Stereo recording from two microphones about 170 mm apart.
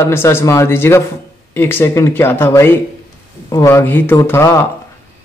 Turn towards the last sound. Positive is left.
turn(degrees=15)  # may be behind; listen again after turning